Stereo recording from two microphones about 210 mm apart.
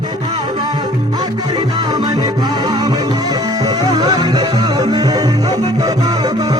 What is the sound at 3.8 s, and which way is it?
Music, 20° right (ahead or behind).